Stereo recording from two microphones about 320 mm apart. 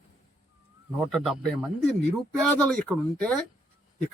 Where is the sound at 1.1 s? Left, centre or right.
Centre.